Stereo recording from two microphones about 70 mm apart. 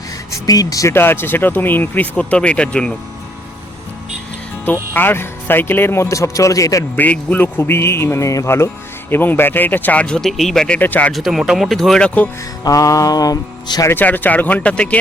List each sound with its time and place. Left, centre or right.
0.3 s mantra: left
0.9 s speech: left; by 2.9 s centre
4.6 s speech: left
6.9 s speech: left
8.4 s speech: left; by 10.2 s centre
10.2 s speech: centre
10.8 s speech: left
11.1 s speech: centre
12.0 s speech: left
12.6 s mantra: left
14.0 s speech: left